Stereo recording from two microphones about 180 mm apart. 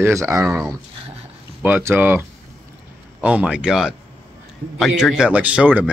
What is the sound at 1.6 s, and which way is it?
Speech, 10° right (ahead or behind).